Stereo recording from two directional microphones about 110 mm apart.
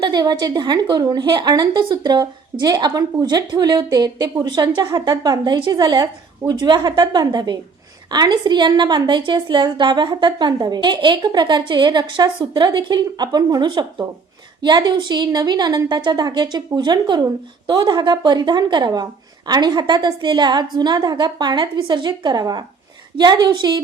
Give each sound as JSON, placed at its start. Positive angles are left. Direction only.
{"t": 0.0, "sound": "a woman's voice", "side_deg": -40}